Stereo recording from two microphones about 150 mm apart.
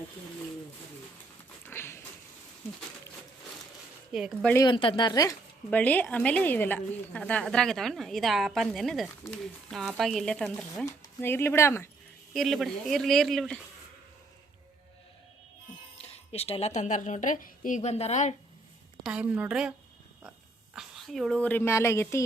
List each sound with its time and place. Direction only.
1.6 s a sound: 15° left (ahead or behind)
4.1 s a woman's voice: centre (ahead or behind)
4.6 s a woman's voice: 35° left (ahead or behind)
5.7 s a woman's voice: 10° left (ahead or behind)
10.8 s speech: 15° left (ahead or behind)
12.3 s a woman's voice: centre (ahead or behind)
16.0 s a woman's voice: 40° left (ahead or behind)
19.0 s a woman's voice: 10° right (ahead or behind)
20.7 s speech: centre (ahead or behind); by 22.2 s 20° left (ahead or behind)